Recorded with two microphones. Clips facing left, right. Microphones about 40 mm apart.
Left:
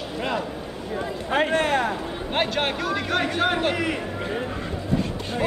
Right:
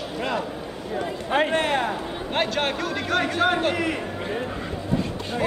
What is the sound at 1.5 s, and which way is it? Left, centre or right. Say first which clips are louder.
Speech: left 1 dB; right.